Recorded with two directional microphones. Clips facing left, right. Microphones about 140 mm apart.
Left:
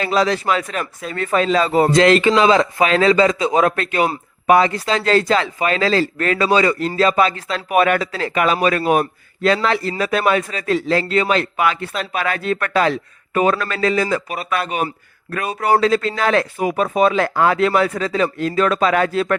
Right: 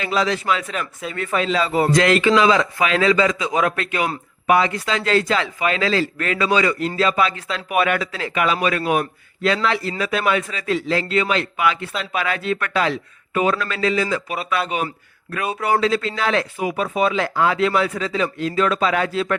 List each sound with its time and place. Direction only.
0.0 s speech: 40° left (ahead or behind)
1.9 s a man's voice: 30° left (ahead or behind); by 14.6 s 45° left (ahead or behind)
15.6 s a man's voice: 40° left (ahead or behind)